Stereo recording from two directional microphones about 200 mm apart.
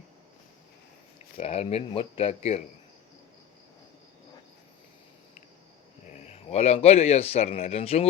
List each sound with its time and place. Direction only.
1.4 s speech: 30° left (ahead or behind)
6.1 s speech: 35° left (ahead or behind)